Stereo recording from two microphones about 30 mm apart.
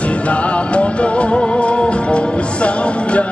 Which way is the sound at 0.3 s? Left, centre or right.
Left.